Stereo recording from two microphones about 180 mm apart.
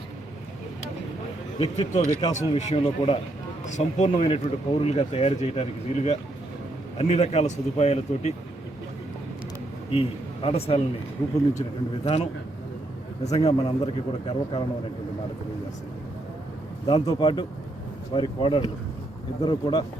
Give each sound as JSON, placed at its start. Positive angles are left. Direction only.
{"t": 1.5, "sound": "speech", "side_deg": 30}
{"t": 9.9, "sound": "a man's voice", "side_deg": 30}
{"t": 12.0, "sound": "speech", "side_deg": 35}
{"t": 13.5, "sound": "a man's voice", "side_deg": 30}
{"t": 16.8, "sound": "a man's voice", "side_deg": 25}